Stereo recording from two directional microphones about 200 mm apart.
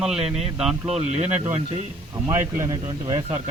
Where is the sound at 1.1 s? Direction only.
35° right (ahead or behind).